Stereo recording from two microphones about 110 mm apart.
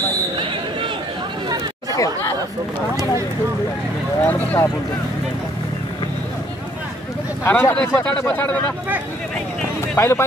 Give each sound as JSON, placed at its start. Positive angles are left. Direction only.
{"t": 1.9, "sound": "chatter", "side_deg": 30}
{"t": 4.2, "sound": "speech", "side_deg": 15}
{"t": 7.4, "sound": "speech", "side_deg": 20}
{"t": 9.9, "sound": "speech", "side_deg": 20}